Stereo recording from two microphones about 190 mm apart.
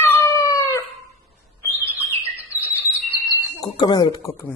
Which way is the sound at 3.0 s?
Centre (ahead or behind).